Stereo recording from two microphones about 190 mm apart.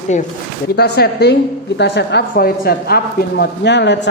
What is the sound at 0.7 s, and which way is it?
A woman's voice, 60° left (ahead or behind).